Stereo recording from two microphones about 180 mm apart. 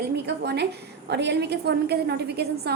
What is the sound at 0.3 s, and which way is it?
A woman's voice, 70° right (ahead or behind).